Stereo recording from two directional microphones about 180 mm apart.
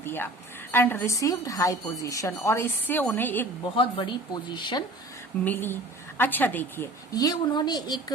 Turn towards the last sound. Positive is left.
turn(degrees=25)  # may be behind; listen again after turning